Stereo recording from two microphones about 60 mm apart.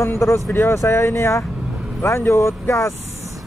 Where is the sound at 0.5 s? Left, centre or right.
Left.